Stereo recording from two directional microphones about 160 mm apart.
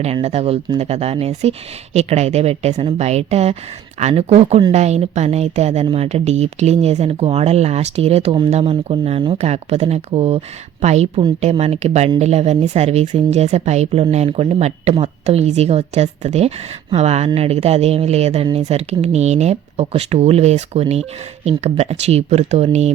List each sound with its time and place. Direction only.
0.0 s speech: 40° right (ahead or behind)